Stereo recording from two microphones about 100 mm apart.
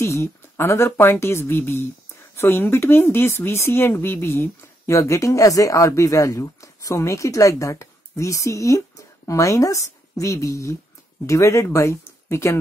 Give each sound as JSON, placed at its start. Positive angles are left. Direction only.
{"t": 0.0, "sound": "speech", "side_deg": 25}